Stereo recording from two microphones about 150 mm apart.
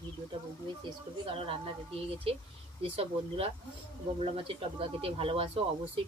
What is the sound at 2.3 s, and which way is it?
Speech, 40° right (ahead or behind).